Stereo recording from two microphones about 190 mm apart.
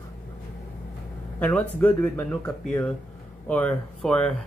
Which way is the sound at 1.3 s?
10° left (ahead or behind).